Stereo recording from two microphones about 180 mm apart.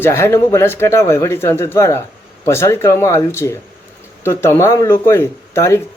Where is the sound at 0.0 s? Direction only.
15° left (ahead or behind).